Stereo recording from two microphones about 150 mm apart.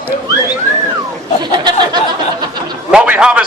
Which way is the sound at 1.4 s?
30° right (ahead or behind).